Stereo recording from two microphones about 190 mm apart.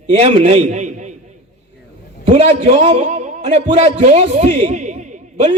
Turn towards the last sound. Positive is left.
turn(degrees=-40)  # may be behind; listen again after turning